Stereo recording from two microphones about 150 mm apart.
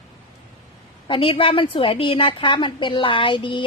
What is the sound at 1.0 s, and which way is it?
A woman's voice, 35° left (ahead or behind).